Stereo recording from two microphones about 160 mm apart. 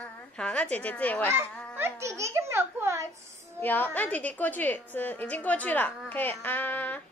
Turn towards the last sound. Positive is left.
turn(degrees=10)  # may be behind; listen again after turning